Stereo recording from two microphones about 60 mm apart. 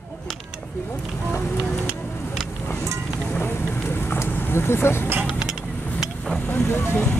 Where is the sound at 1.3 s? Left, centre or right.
Left.